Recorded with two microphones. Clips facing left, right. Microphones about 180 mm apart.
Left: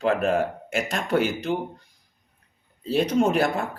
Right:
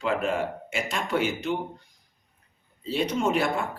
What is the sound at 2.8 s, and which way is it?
Speech, 40° left (ahead or behind).